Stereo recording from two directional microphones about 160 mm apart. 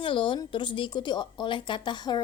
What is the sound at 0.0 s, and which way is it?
A woman's voice, 30° left (ahead or behind).